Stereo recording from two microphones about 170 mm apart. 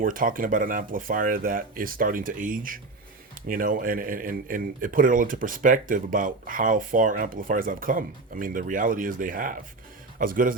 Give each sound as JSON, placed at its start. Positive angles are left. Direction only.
{"t": 0.0, "sound": "speech", "side_deg": -55}